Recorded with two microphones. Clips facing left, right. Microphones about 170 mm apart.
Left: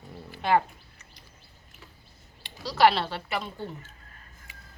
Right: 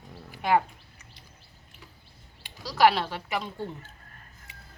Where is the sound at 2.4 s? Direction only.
10° right (ahead or behind).